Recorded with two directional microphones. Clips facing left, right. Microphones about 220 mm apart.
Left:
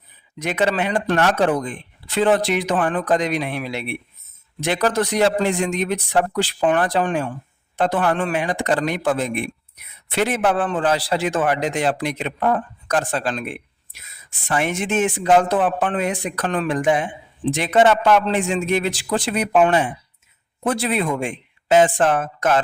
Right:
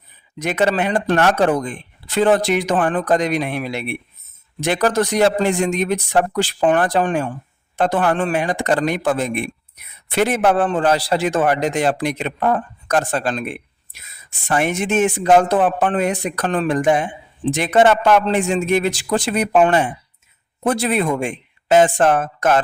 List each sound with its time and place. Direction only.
0.3 s speech: 45° right (ahead or behind)
14.4 s speech: 45° right (ahead or behind)